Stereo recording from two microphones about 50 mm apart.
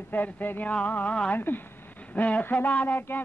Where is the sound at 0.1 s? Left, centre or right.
Left.